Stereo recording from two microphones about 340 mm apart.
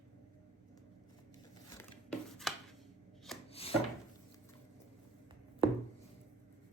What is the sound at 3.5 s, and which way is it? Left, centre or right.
Wood, centre.